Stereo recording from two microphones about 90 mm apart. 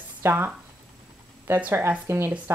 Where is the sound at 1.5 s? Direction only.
25° right (ahead or behind).